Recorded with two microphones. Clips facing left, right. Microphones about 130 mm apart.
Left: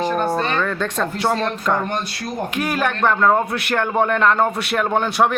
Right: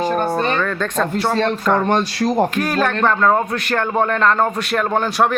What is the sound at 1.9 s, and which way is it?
Speech, 90° right.